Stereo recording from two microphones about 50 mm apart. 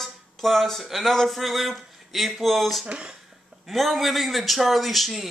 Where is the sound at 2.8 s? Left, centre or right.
Right.